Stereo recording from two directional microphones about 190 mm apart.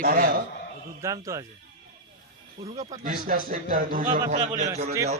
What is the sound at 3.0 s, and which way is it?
A man's voice, 50° right (ahead or behind).